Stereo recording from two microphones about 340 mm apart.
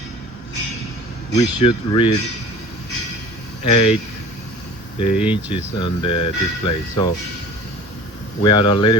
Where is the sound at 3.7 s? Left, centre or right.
Centre.